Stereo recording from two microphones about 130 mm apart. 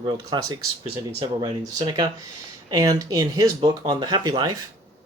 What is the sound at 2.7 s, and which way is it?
Speech, 30° right (ahead or behind).